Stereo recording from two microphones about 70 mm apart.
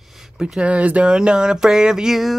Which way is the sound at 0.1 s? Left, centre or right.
Centre.